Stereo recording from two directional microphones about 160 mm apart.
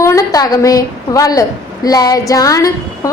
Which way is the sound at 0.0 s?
20° left (ahead or behind).